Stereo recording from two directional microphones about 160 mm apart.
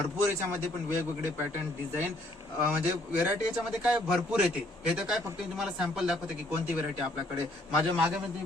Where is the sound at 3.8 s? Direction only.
5° right (ahead or behind).